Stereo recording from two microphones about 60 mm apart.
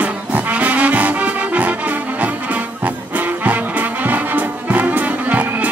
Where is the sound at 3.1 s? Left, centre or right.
Right.